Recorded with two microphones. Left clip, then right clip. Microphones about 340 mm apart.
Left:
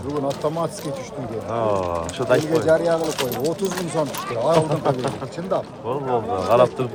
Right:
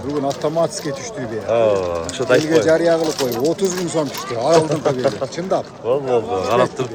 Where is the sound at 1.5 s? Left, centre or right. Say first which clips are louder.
Right 5 dB; centre.